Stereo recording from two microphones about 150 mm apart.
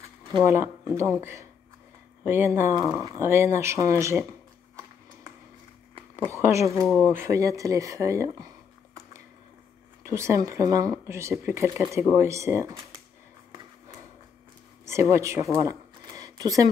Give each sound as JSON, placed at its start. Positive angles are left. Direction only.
{"t": 0.4, "sound": "speech", "side_deg": -15}
{"t": 2.8, "sound": "speech", "side_deg": 0}
{"t": 3.1, "sound": "speech", "side_deg": -20}
{"t": 6.3, "sound": "speech", "side_deg": -20}
{"t": 6.8, "sound": "speech", "side_deg": 5}
{"t": 7.1, "sound": "speech", "side_deg": -20}
{"t": 10.0, "sound": "speech", "side_deg": -20}
{"t": 14.9, "sound": "speech", "side_deg": -20}